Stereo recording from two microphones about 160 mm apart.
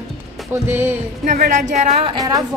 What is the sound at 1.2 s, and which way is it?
Speech, 55° right (ahead or behind).